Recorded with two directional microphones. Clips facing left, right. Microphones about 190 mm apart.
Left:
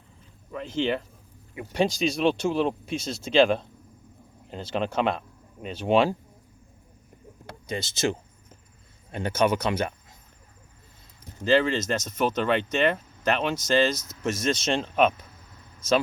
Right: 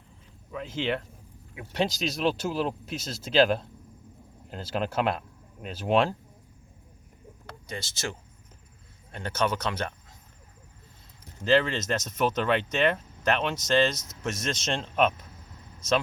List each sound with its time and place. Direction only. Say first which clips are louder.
0.5 s speech: left 3 dB; 5° right (ahead or behind)
7.7 s speech: left 8 dB; 20° left (ahead or behind)
9.1 s speech: left 5 dB; 15° left (ahead or behind)
11.4 s speech: left 2 dB; centre (ahead or behind)